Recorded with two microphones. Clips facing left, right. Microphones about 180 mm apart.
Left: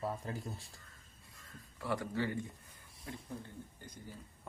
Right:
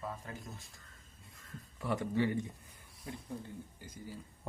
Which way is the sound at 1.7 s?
20° right (ahead or behind).